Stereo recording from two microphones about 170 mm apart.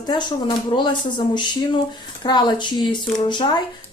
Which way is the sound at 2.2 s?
25° left (ahead or behind).